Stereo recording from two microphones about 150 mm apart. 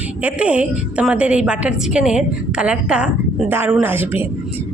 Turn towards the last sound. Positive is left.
turn(degrees=-15)  # may be behind; listen again after turning